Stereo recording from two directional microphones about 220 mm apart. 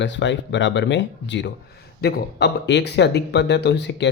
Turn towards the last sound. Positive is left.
turn(degrees=50)  # may be behind; listen again after turning